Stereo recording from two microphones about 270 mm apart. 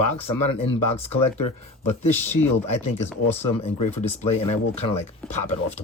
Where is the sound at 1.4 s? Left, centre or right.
Left.